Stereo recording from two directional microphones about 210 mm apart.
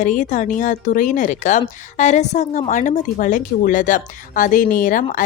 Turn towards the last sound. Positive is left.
turn(degrees=40)  # may be behind; listen again after turning